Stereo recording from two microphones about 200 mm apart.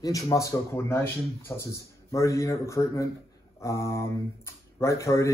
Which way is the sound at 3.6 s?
15° left (ahead or behind).